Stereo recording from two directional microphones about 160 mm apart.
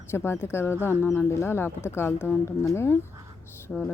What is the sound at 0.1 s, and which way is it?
Speech, 15° left (ahead or behind).